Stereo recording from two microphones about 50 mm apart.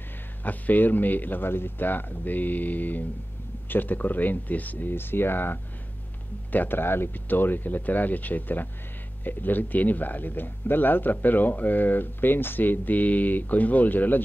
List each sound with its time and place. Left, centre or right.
0.4 s speech: left